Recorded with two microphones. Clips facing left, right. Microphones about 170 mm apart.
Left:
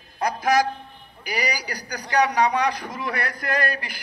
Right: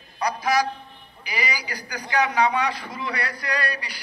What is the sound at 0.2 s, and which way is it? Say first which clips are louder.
A man's voice: left 2 dB; 50° left (ahead or behind).